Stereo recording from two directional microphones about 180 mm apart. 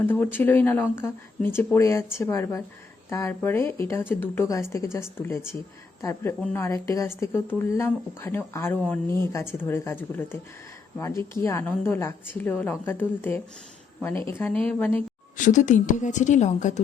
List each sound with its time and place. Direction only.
0.0 s speech: 10° left (ahead or behind)
6.0 s speech: 15° left (ahead or behind)
15.4 s a woman's voice: 45° left (ahead or behind)